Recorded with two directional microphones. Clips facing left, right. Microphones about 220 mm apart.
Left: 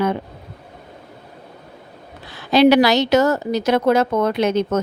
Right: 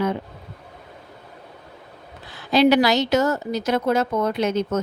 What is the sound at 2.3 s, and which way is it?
Speech, 75° left (ahead or behind).